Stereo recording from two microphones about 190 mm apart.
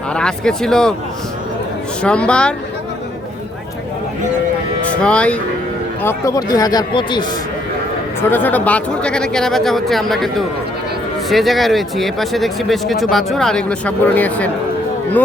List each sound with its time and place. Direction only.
0.1 s speech: 5° left (ahead or behind)
2.0 s speech: 5° left (ahead or behind)
4.9 s speech: 5° left (ahead or behind); by 7.3 s 25° left (ahead or behind)
8.3 s speech: 10° left (ahead or behind)